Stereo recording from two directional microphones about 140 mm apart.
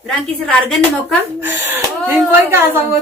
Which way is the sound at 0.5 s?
5° left (ahead or behind).